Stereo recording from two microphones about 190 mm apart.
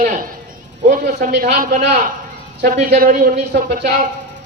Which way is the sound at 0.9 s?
50° right (ahead or behind).